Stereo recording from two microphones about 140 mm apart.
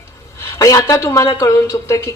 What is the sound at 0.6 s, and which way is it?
Speech, 25° left (ahead or behind).